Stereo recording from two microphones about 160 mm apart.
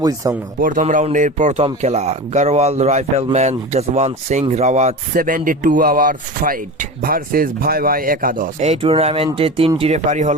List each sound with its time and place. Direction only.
0.0 s speech: 20° right (ahead or behind)
0.6 s a man's voice: 55° right (ahead or behind)
8.6 s speech: 40° right (ahead or behind)